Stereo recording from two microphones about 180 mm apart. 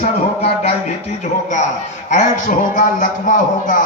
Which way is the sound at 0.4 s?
35° left (ahead or behind).